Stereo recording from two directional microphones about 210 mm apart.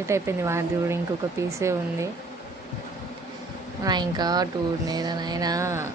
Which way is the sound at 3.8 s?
20° right (ahead or behind).